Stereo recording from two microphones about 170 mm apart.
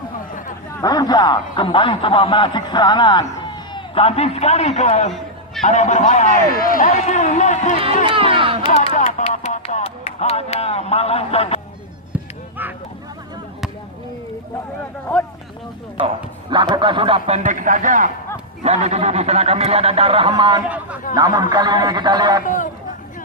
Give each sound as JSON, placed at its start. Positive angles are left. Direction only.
{"t": 0.8, "sound": "a man's voice", "side_deg": 20}
{"t": 7.0, "sound": "a man's voice", "side_deg": 45}
{"t": 8.0, "sound": "a man's voice", "side_deg": -30}
{"t": 9.0, "sound": "music", "side_deg": 45}
{"t": 9.3, "sound": "speech", "side_deg": 40}
{"t": 12.1, "sound": "chop", "side_deg": -10}
{"t": 15.1, "sound": "speech", "side_deg": 10}
{"t": 16.5, "sound": "a man's voice", "side_deg": -25}
{"t": 20.7, "sound": "speech", "side_deg": -10}
{"t": 21.2, "sound": "a man's voice", "side_deg": -20}
{"t": 22.4, "sound": "a man's voice", "side_deg": 50}